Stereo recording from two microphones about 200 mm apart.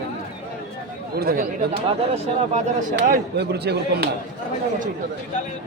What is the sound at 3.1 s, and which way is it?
Speech, 55° right (ahead or behind).